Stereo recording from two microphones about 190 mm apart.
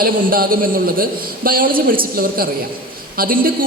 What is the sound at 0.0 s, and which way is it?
Speech, 50° right (ahead or behind).